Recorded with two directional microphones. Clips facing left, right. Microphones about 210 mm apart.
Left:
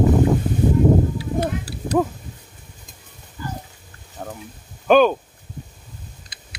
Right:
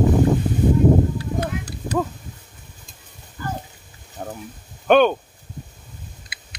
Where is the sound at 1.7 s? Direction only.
10° left (ahead or behind).